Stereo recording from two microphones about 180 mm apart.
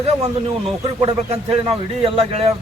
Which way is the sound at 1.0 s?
30° right (ahead or behind).